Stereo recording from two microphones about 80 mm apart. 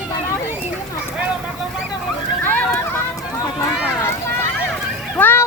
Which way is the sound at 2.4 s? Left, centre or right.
Left.